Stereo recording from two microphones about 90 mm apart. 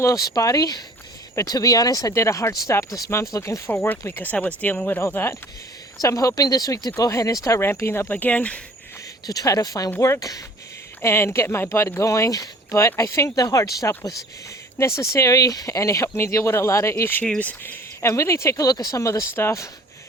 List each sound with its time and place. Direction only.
0.0 s speech: 40° left (ahead or behind)
6.0 s speech: 40° left (ahead or behind); by 8.6 s 15° left (ahead or behind)
9.2 s speech: 40° left (ahead or behind)
11.0 s speech: 30° left (ahead or behind)
17.2 s speech: 15° left (ahead or behind)
17.6 s speech: 25° left (ahead or behind)
18.1 s speech: 35° left (ahead or behind)
18.7 s speech: 45° left (ahead or behind)